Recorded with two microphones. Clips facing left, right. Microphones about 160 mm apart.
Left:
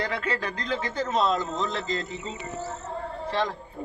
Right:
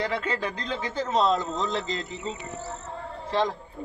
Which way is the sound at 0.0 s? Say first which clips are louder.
Right 1 dB; 20° right (ahead or behind).